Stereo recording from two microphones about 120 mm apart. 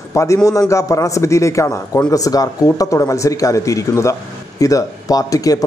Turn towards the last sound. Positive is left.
turn(degrees=30)  # may be behind; listen again after turning